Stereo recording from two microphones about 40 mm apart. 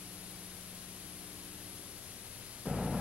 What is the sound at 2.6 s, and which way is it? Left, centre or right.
Static, centre.